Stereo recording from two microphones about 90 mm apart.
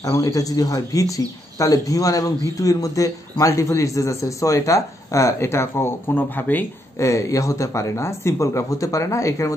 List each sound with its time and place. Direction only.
0.0 s a man's voice: 40° left (ahead or behind); by 6.6 s 20° left (ahead or behind)
7.0 s a man's voice: 35° left (ahead or behind)